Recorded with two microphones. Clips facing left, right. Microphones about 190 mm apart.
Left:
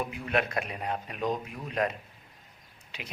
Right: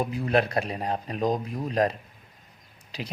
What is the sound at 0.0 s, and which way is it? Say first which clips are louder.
A man's voice: right 6 dB; 35° right (ahead or behind).